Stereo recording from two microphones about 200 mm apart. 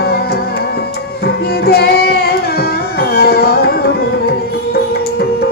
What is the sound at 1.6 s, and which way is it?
Music, 50° left (ahead or behind).